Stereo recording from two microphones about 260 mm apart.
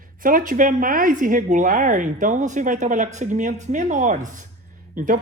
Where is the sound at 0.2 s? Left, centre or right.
Right.